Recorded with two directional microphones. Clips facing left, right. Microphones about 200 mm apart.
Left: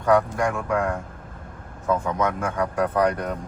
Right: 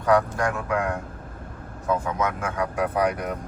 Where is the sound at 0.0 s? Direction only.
Centre (ahead or behind).